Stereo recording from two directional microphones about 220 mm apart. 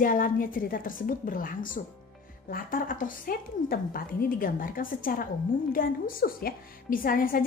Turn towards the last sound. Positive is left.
turn(degrees=40)  # may be behind; listen again after turning